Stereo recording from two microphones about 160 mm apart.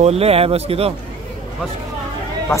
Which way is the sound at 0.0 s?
40° right (ahead or behind).